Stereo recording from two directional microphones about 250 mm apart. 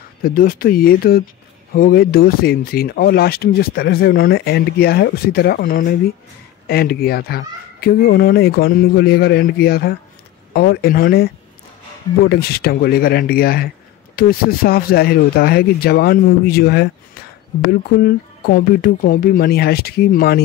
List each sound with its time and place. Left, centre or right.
0.2 s speech: left
12.3 s speech: left